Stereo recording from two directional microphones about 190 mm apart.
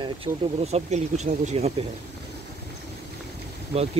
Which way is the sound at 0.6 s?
35° right (ahead or behind).